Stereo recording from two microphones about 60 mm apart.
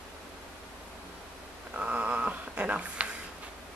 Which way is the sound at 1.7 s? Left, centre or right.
Right.